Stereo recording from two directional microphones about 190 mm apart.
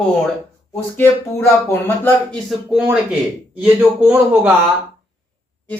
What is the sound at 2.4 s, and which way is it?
A man's voice, 5° right (ahead or behind).